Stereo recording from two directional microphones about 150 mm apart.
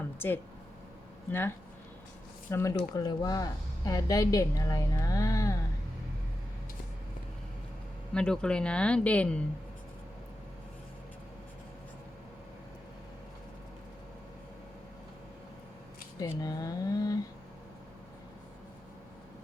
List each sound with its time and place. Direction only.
1.3 s speech: 15° left (ahead or behind)
8.1 s speech: 5° left (ahead or behind)
16.2 s speech: 25° left (ahead or behind)